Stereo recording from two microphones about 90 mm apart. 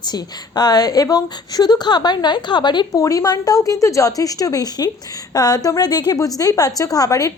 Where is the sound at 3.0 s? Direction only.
40° left (ahead or behind).